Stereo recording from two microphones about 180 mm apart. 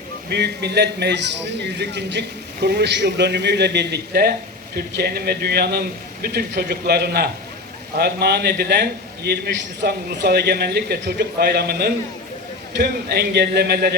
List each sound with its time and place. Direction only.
0.3 s a man's voice: 65° right (ahead or behind)